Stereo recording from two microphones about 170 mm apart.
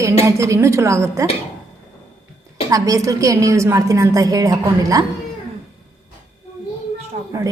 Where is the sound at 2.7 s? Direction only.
20° right (ahead or behind).